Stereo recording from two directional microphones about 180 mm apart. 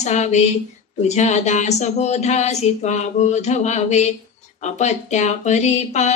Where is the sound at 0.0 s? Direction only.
40° left (ahead or behind).